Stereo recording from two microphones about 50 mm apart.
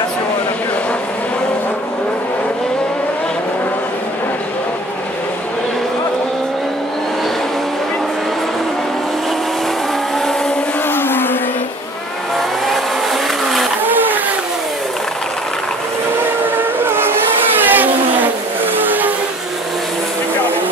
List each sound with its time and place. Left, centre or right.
10.9 s music: left
12.4 s vehicle: centre
13.8 s vehicle: right
16.5 s steam whistle: right
17.6 s vehicle: right